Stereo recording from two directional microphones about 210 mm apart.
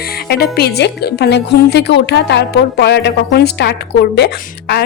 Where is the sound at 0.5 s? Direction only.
50° left (ahead or behind).